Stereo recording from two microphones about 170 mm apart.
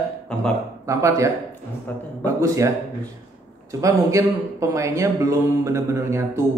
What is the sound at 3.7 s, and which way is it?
Speech, 20° right (ahead or behind).